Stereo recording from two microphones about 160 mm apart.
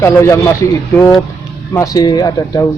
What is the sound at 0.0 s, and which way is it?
Speech, 15° left (ahead or behind).